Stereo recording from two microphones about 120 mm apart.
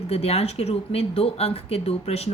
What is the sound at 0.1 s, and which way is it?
Speech, 55° left (ahead or behind).